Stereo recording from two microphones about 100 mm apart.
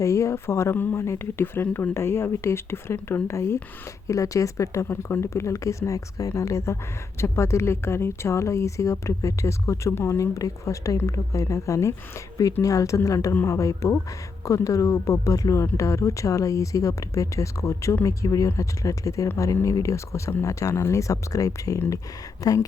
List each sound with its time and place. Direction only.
0.0 s speech: 30° left (ahead or behind)